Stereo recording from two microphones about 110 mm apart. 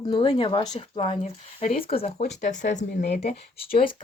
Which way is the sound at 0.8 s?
75° left (ahead or behind).